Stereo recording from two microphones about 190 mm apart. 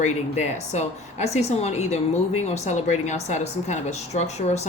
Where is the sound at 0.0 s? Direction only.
35° left (ahead or behind).